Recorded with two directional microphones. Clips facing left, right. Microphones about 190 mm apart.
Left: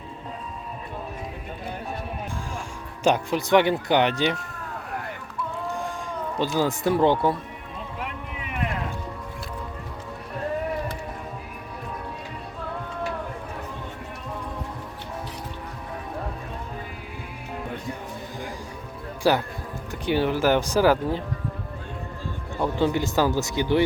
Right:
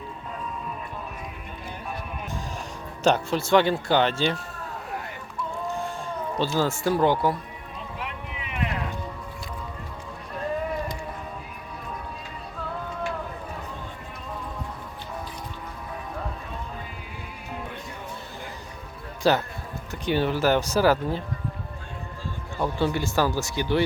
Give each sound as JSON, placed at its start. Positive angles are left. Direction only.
{"t": 3.0, "sound": "speech", "side_deg": 15}
{"t": 6.6, "sound": "speech", "side_deg": 20}
{"t": 8.0, "sound": "a sound", "side_deg": 45}
{"t": 19.2, "sound": "speech", "side_deg": 10}
{"t": 22.6, "sound": "speech", "side_deg": 15}